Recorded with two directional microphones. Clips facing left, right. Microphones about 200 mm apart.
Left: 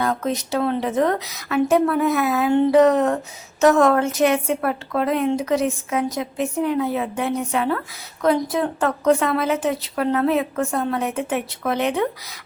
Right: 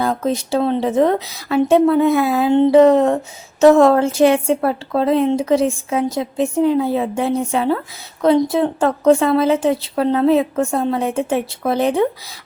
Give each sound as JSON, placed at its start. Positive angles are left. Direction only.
{"t": 0.0, "sound": "a woman's voice", "side_deg": -30}